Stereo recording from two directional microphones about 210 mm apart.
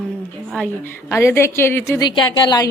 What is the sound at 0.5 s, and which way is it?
A woman's voice, 10° left (ahead or behind).